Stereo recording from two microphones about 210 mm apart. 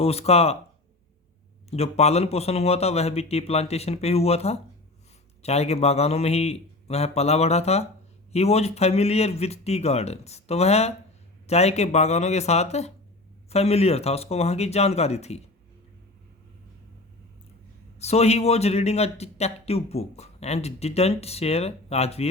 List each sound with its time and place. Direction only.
0.0 s speech: 30° left (ahead or behind)
1.7 s speech: 30° left (ahead or behind)
18.0 s speech: 30° left (ahead or behind)